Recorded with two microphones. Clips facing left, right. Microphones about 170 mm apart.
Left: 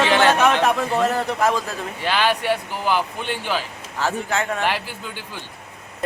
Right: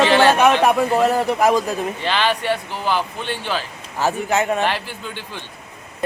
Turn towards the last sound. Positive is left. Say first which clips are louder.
# right 2 dB
turn(degrees=10)  # may be behind; listen again after turning